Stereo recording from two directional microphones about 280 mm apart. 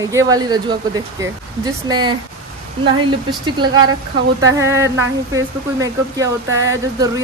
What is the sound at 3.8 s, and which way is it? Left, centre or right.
Speech, right.